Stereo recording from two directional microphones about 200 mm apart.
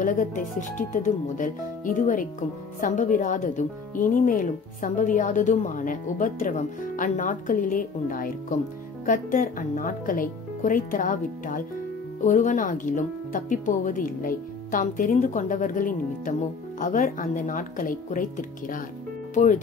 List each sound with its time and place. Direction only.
0.0 s speech: 40° left (ahead or behind)